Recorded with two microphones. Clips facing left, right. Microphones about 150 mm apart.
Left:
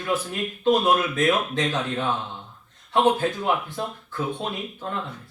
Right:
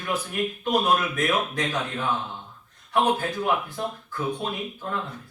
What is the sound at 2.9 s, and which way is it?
Speech, 25° left (ahead or behind).